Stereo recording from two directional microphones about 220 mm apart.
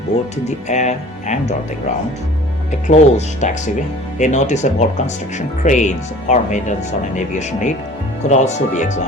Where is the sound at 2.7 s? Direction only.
30° left (ahead or behind).